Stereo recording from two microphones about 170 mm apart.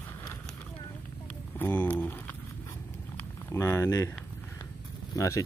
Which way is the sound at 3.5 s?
15° left (ahead or behind).